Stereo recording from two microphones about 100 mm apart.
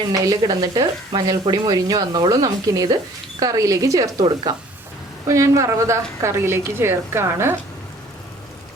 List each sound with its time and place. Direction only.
0.1 s a woman's voice: 35° right (ahead or behind)